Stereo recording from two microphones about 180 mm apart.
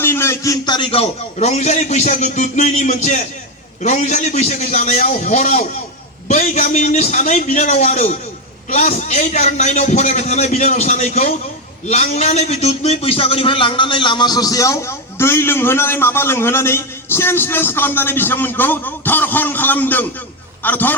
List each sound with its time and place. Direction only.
0.0 s a man's voice: 15° left (ahead or behind)